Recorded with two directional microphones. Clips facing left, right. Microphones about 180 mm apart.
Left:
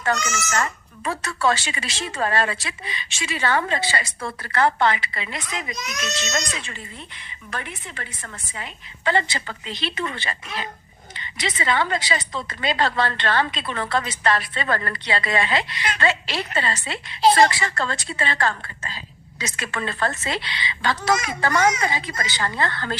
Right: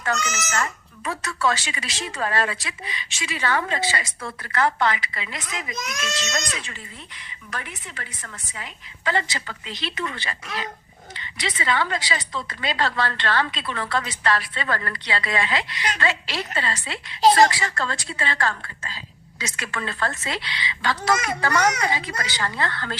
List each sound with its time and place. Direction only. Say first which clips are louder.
0.0 s a woman's voice: left 2 dB; 30° left (ahead or behind)
11.1 s a sound: left 2 dB; 20° left (ahead or behind)
11.5 s a woman's voice: left 2 dB; 25° left (ahead or behind)
17.2 s a woman's voice: even; 40° right (ahead or behind)
17.7 s a woman's voice: left 2 dB; 25° left (ahead or behind)